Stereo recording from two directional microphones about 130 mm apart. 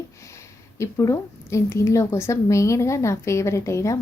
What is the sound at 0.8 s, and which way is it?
A woman's voice, 25° left (ahead or behind).